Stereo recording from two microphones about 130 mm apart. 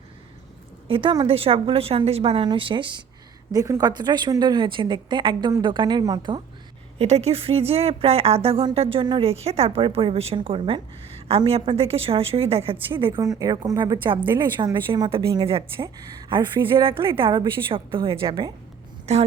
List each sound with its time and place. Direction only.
0.9 s a woman's voice: 40° right (ahead or behind)
7.0 s a woman's voice: 55° right (ahead or behind)
9.3 s a woman's voice: 50° right (ahead or behind)
13.2 s a woman's voice: 25° right (ahead or behind)
15.4 s a woman's voice: 45° right (ahead or behind)
19.1 s a woman's voice: 50° right (ahead or behind)